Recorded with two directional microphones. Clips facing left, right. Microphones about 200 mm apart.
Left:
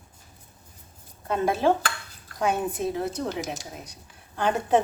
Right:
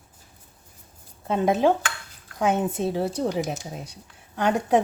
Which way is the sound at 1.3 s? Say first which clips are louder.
Right 2 dB; 20° right (ahead or behind).